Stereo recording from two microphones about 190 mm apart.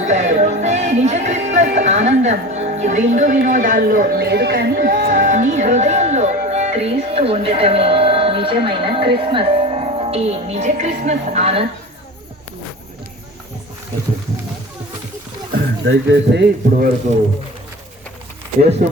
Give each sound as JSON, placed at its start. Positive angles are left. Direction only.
{"t": 0.0, "sound": "music", "side_deg": -40}
{"t": 15.5, "sound": "speech", "side_deg": -70}
{"t": 18.8, "sound": "speech", "side_deg": -50}